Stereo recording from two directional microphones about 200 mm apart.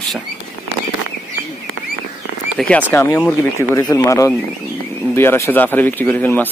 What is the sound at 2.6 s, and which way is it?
Speech, 5° left (ahead or behind).